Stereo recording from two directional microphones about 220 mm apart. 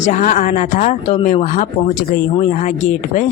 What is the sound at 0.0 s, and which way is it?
Speech, 35° left (ahead or behind).